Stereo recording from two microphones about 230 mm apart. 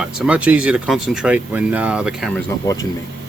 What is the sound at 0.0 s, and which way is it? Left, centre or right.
Speech, centre.